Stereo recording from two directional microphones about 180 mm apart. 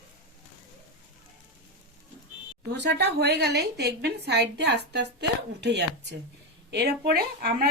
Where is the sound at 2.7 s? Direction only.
70° right (ahead or behind).